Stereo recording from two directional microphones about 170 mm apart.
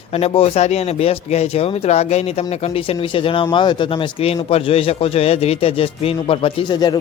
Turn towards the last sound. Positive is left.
turn(degrees=25)  # may be behind; listen again after turning